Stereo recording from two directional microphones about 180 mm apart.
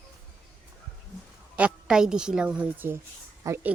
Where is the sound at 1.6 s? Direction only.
5° right (ahead or behind).